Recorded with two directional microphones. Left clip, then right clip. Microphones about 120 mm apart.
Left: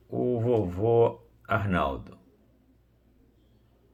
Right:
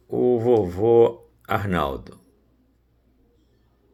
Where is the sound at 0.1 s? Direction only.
45° right (ahead or behind).